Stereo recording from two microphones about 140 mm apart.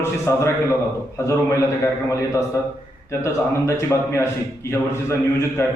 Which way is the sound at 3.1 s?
20° left (ahead or behind).